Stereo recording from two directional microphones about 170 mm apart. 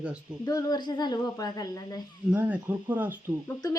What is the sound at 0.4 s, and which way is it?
A woman's voice, 20° left (ahead or behind).